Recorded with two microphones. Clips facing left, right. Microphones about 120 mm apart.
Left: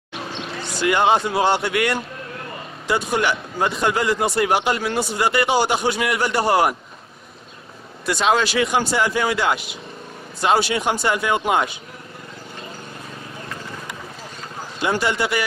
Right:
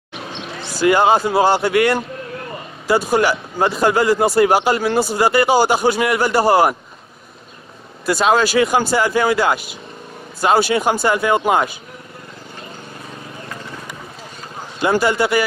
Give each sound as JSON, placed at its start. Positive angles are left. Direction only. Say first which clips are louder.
{"t": 0.3, "sound": "basketball bounce", "louder": "right 1 dB", "side_deg": 0}
{"t": 0.9, "sound": "a man's voice", "louder": "right 2 dB", "side_deg": -40}
{"t": 1.6, "sound": "speech", "louder": "right 6 dB", "side_deg": -50}
{"t": 3.1, "sound": "a man's voice", "louder": "right 5 dB", "side_deg": -40}
{"t": 6.3, "sound": "a man's voice", "louder": "right 4 dB", "side_deg": -30}
{"t": 8.2, "sound": "a man's voice", "louder": "right 4 dB", "side_deg": -40}
{"t": 10.7, "sound": "speech", "louder": "right 4 dB", "side_deg": -50}
{"t": 14.8, "sound": "speech", "louder": "right 5 dB", "side_deg": -55}